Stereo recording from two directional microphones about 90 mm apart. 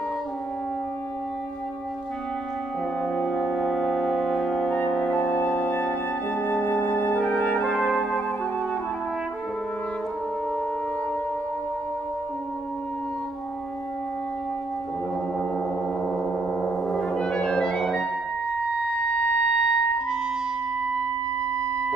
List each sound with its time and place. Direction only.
3.0 s brass instrument: 10° left (ahead or behind)
16.6 s music: centre (ahead or behind)
19.1 s wind instrument: 10° left (ahead or behind)